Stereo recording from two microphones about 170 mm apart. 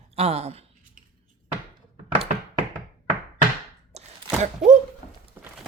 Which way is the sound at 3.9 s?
40° right (ahead or behind).